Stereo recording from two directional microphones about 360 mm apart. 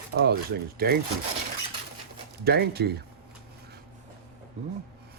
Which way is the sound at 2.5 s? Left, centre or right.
Right.